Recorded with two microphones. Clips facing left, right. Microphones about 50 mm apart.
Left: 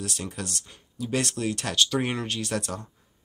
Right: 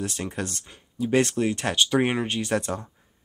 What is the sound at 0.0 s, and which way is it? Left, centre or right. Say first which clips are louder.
Speech: right 4 dB; right.